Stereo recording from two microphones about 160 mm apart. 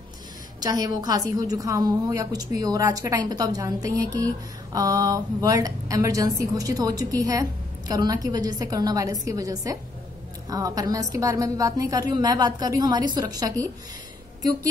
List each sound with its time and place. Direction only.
0.6 s a woman's voice: 25° right (ahead or behind)